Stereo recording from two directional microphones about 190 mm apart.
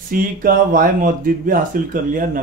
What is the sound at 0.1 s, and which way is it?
Speech, 50° right (ahead or behind).